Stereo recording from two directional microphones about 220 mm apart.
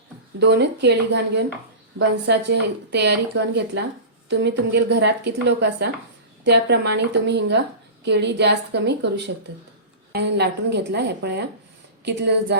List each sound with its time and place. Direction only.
0.3 s speech: 50° right (ahead or behind)